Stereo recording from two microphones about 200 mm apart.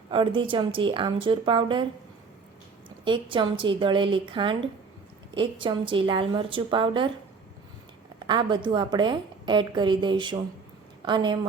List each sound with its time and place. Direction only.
0.1 s a woman's voice: 25° right (ahead or behind)
3.0 s a woman's voice: 25° right (ahead or behind)
8.3 s a woman's voice: 25° right (ahead or behind)